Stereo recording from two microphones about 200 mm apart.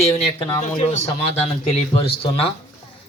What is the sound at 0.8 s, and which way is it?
Speech, 30° left (ahead or behind).